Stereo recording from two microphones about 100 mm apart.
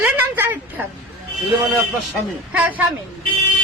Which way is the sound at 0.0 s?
20° right (ahead or behind).